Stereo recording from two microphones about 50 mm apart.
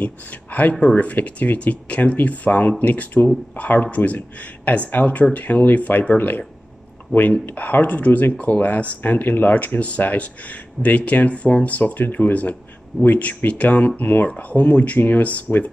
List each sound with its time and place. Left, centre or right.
0.0 s speech: left
7.4 s speech: left